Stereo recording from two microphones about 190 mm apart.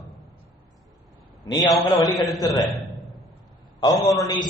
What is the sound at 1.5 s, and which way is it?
Speech, 20° left (ahead or behind).